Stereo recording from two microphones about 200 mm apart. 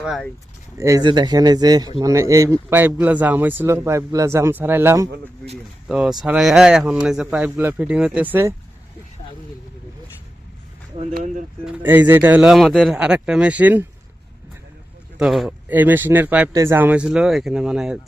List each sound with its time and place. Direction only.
0.0 s speech: centre (ahead or behind)
0.8 s speech: 15° right (ahead or behind)
11.1 s speech: 40° right (ahead or behind)
11.6 s speech: 10° right (ahead or behind)
15.2 s speech: 5° right (ahead or behind)